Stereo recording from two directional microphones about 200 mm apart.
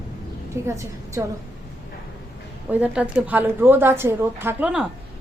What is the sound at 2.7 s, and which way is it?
A woman's voice, 5° right (ahead or behind).